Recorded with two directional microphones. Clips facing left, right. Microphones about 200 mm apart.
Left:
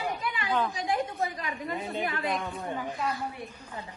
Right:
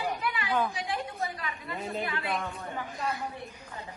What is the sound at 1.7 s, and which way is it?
Speech, centre (ahead or behind).